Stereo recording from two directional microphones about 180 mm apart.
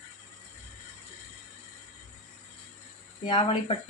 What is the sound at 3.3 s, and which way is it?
Speech, 30° left (ahead or behind).